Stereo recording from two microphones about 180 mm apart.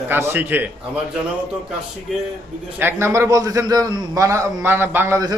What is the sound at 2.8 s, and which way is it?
A man's voice, 15° right (ahead or behind).